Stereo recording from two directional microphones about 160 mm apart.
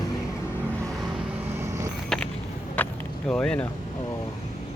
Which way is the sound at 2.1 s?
5° left (ahead or behind).